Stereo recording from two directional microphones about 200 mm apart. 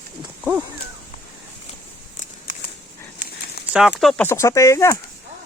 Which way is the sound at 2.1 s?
40° left (ahead or behind).